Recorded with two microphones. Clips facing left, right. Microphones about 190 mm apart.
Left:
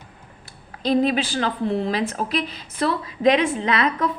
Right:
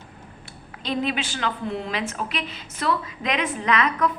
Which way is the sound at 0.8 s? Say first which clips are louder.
Left 7 dB; 40° left (ahead or behind).